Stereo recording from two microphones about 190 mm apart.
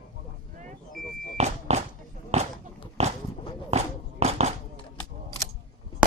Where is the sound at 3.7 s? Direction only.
35° right (ahead or behind).